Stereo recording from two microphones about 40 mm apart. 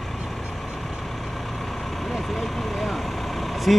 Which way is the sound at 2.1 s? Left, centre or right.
Centre.